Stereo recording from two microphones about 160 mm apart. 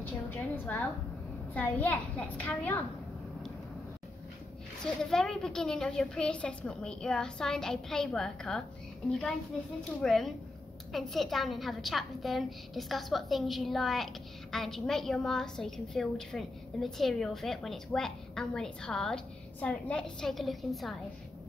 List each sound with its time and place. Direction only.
0.0 s a sound: 10° left (ahead or behind)
1.5 s a child's voice: 10° left (ahead or behind)
4.8 s a woman's voice: 5° left (ahead or behind)
10.0 s a woman's voice: centre (ahead or behind)